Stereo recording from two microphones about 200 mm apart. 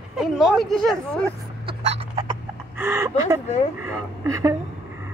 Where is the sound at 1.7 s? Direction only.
30° right (ahead or behind).